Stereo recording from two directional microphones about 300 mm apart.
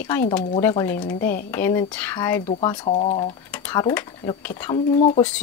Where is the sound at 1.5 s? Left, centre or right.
Centre.